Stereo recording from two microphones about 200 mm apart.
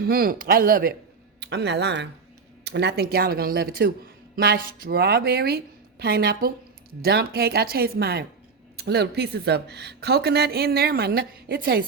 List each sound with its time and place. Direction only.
0.0 s speech: 50° right (ahead or behind)
1.4 s speech: 55° right (ahead or behind)